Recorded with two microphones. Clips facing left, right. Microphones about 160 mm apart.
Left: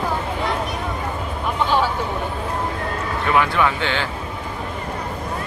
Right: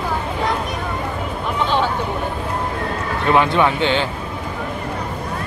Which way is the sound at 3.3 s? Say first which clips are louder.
Right 3 dB; 25° right (ahead or behind).